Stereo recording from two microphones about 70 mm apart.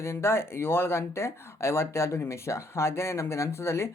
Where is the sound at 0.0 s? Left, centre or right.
Left.